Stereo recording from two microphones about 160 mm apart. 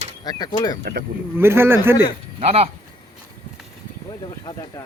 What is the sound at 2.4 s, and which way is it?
Speech, 40° right (ahead or behind).